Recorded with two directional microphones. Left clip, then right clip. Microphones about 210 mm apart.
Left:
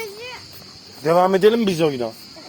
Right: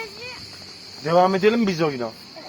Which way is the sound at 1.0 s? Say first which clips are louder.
Left 3 dB; 20° left (ahead or behind).